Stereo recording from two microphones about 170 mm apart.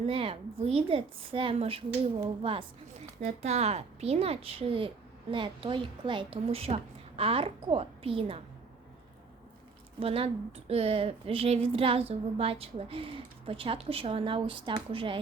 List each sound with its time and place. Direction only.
0.0 s a woman's voice: 35° right (ahead or behind)
10.0 s a woman's voice: 35° right (ahead or behind)